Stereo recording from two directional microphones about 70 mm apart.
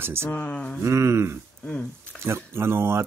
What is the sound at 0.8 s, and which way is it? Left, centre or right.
Speech, right.